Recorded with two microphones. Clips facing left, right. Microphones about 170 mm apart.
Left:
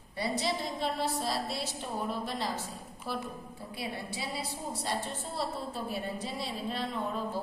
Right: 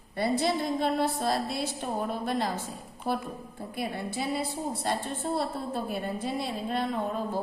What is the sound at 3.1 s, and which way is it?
A woman's voice, 50° right (ahead or behind).